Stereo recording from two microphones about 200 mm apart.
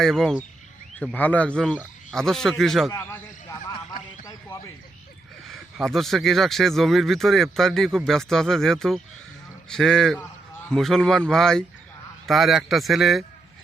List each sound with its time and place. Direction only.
0.0 s speech: centre (ahead or behind)
2.9 s a sound: 10° left (ahead or behind)
5.5 s speech: centre (ahead or behind)